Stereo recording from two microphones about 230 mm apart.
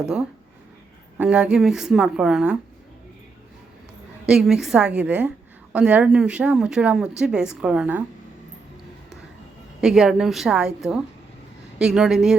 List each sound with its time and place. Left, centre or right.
0.0 s speech: centre
4.3 s speech: centre
9.8 s speech: centre